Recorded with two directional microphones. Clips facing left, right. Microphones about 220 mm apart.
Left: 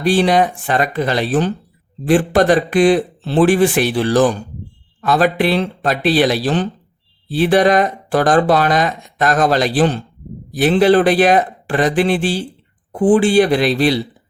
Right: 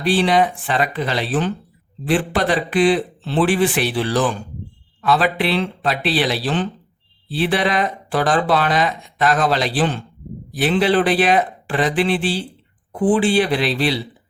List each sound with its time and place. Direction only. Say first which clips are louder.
0.0 s speech: left 3 dB; 45° left (ahead or behind)